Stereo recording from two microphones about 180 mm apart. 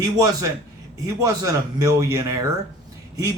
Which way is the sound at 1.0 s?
20° right (ahead or behind).